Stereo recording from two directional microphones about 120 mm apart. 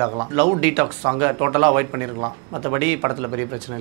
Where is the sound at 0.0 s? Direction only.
25° right (ahead or behind).